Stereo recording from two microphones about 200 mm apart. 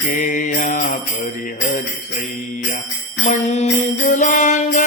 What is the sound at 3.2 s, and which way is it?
Jingle bell, 35° left (ahead or behind).